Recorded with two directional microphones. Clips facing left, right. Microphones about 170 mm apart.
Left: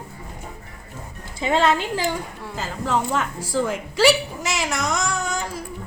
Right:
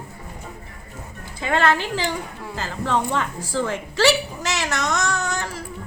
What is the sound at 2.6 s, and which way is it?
A woman's voice, 5° left (ahead or behind).